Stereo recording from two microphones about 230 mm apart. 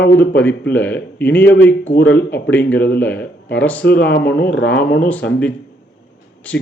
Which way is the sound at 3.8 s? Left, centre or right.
Left.